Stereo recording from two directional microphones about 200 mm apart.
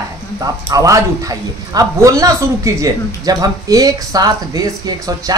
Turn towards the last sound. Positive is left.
turn(degrees=-20)  # may be behind; listen again after turning